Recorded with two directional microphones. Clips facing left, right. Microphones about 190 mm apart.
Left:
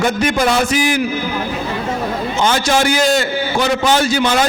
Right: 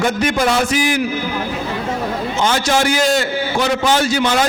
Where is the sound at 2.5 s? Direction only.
15° left (ahead or behind).